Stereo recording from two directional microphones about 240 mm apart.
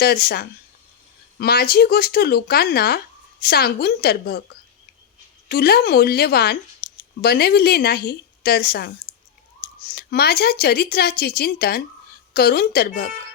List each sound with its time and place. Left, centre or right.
0.0 s speech: left
5.5 s speech: left
9.1 s clicking: left
9.9 s speech: left